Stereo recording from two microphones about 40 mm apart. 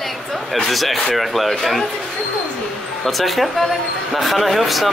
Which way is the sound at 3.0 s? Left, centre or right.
Centre.